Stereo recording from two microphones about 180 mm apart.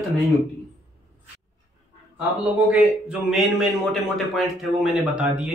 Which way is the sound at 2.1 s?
10° right (ahead or behind).